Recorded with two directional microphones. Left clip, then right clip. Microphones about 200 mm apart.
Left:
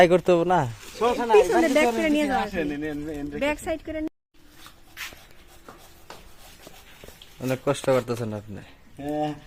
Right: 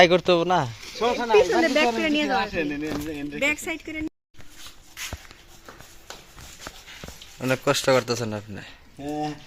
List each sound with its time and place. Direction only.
0.0 s speech: 20° left (ahead or behind)
0.8 s speech: 5° left (ahead or behind)
1.6 s speech: 55° left (ahead or behind)
2.6 s speech: 10° left (ahead or behind)
3.4 s speech: 45° left (ahead or behind)
7.3 s speech: centre (ahead or behind)